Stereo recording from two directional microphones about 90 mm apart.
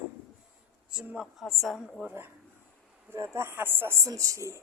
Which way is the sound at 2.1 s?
20° right (ahead or behind).